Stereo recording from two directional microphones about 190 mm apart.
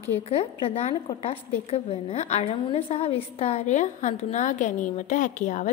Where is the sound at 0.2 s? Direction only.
30° left (ahead or behind).